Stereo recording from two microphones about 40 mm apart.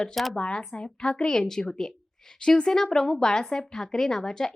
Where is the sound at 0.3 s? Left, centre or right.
Left.